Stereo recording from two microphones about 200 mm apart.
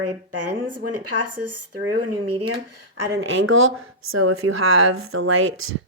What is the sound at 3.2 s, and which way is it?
Speech, 85° right.